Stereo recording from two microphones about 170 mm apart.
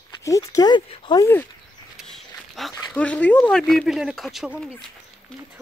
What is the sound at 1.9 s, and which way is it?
Walk, centre (ahead or behind).